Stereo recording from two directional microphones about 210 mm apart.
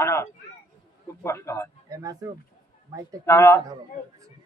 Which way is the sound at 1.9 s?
15° right (ahead or behind).